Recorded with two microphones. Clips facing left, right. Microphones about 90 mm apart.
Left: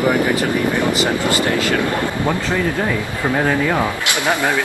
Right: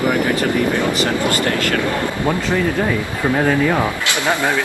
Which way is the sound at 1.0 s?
20° left (ahead or behind).